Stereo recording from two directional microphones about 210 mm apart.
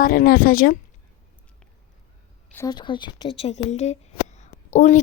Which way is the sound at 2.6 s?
20° left (ahead or behind).